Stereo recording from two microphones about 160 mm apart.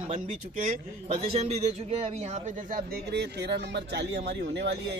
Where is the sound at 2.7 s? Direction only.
80° right.